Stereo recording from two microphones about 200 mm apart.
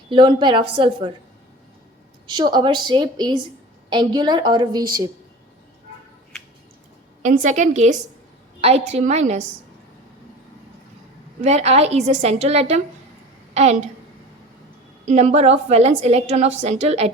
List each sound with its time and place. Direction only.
0.1 s a woman's voice: 25° right (ahead or behind)
2.2 s a woman's voice: 20° right (ahead or behind)
7.2 s a woman's voice: 40° right (ahead or behind)
11.4 s a woman's voice: 30° right (ahead or behind)
15.0 s a woman's voice: 35° right (ahead or behind)